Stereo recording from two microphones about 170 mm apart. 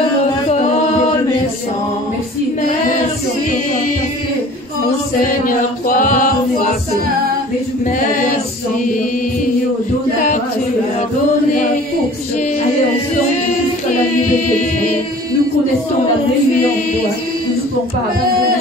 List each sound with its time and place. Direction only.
5.2 s chant: 55° left (ahead or behind)